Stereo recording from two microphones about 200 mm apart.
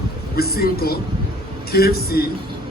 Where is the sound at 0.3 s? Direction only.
50° left (ahead or behind).